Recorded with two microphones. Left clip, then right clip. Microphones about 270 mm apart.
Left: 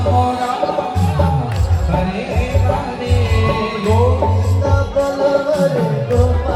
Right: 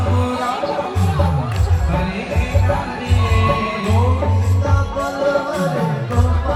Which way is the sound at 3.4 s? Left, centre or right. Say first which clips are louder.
Right 1 dB; centre.